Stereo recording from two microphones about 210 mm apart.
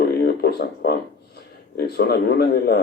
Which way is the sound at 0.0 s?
50° left (ahead or behind).